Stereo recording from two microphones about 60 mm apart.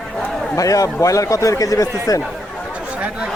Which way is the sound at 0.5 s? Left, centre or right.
Left.